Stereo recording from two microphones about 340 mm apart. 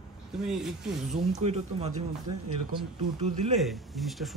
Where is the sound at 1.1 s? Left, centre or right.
Centre.